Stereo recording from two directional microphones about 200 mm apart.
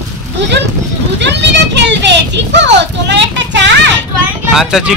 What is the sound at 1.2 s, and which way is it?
A child's voice, 60° right (ahead or behind).